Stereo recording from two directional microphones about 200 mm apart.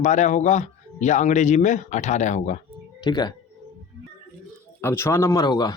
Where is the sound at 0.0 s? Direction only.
35° left (ahead or behind).